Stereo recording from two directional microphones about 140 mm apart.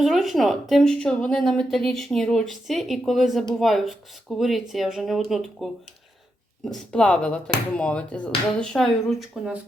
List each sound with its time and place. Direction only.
0.0 s a woman's voice: centre (ahead or behind)
6.9 s speech: 5° left (ahead or behind)